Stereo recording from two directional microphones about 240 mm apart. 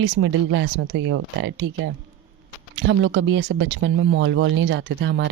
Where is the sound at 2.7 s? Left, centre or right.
Right.